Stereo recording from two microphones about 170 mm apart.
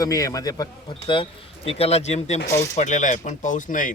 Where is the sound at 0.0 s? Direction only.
20° left (ahead or behind).